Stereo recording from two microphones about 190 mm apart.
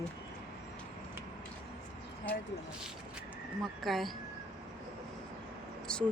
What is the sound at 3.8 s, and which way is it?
Speech, centre (ahead or behind).